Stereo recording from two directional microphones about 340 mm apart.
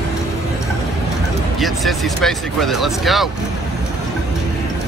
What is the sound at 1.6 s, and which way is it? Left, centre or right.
Speech, centre.